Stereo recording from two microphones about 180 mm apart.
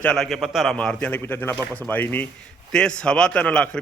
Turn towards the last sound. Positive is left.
turn(degrees=5)  # may be behind; listen again after turning